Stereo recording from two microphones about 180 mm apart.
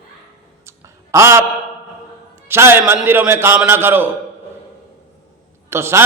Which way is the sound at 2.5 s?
15° right (ahead or behind).